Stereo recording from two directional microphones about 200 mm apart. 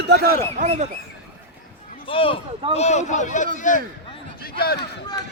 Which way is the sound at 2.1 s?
25° left (ahead or behind).